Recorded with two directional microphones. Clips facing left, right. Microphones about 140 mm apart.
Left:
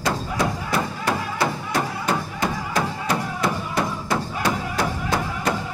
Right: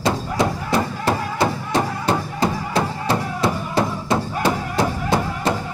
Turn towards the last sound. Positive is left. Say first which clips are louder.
# right 3 dB
turn(degrees=-25)  # may be behind; listen again after turning